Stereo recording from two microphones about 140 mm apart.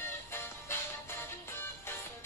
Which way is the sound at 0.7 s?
20° left (ahead or behind).